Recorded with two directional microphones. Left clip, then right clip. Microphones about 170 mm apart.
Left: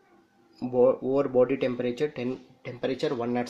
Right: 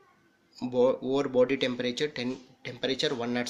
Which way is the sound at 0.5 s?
5° left (ahead or behind).